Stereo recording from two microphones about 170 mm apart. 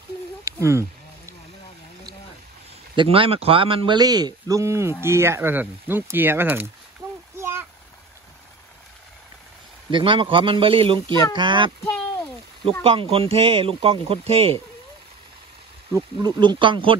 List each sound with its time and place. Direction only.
0.5 s speech: 15° right (ahead or behind)
3.0 s a man's voice: 35° right (ahead or behind); by 6.7 s 10° right (ahead or behind)
7.3 s a sound: 15° right (ahead or behind)
9.8 s a man's voice: 30° right (ahead or behind)
12.8 s speech: 35° right (ahead or behind)
15.9 s a man's voice: 25° right (ahead or behind)